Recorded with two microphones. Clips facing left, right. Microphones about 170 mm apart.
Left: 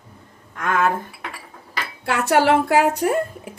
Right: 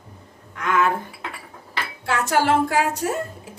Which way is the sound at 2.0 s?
65° left (ahead or behind).